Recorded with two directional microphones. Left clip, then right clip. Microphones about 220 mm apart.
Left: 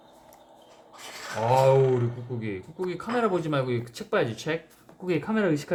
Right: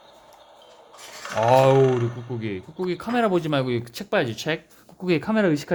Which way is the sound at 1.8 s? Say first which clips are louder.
Right 4 dB; 20° right (ahead or behind).